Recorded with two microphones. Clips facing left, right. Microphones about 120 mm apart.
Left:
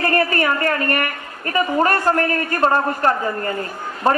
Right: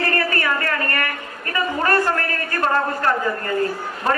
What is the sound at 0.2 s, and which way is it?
A woman's voice, 25° left (ahead or behind).